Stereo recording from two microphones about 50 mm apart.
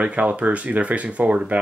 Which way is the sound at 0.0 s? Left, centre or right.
Right.